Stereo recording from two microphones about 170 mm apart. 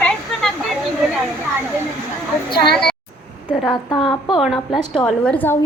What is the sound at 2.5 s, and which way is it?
Speech, 70° left (ahead or behind).